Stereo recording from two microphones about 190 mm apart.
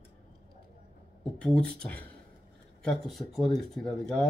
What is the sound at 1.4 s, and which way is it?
Speech, 5° left (ahead or behind).